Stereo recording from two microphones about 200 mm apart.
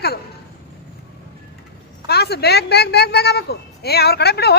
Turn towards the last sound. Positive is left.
turn(degrees=55)  # may be behind; listen again after turning